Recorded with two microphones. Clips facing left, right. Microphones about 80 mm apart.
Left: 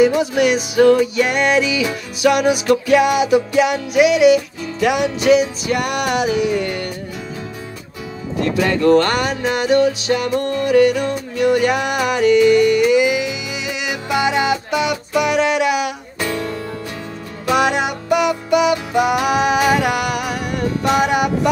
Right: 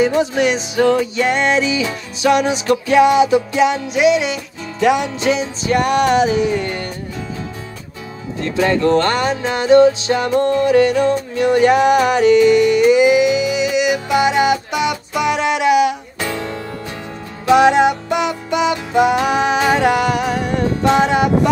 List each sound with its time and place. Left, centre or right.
0.0 s music: right
8.5 s music: right